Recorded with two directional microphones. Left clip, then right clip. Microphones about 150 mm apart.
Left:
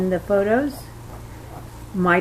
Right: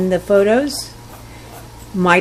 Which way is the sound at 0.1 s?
75° right (ahead or behind).